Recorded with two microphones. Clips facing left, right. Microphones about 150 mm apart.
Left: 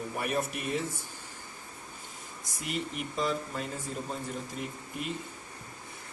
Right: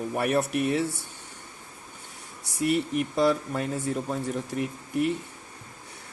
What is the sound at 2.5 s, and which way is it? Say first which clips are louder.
Speech: right 10 dB; 70° right (ahead or behind).